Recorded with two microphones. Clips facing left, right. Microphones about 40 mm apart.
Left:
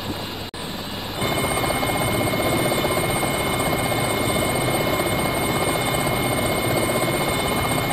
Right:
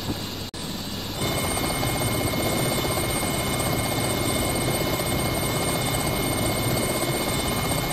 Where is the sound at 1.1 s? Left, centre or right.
Left.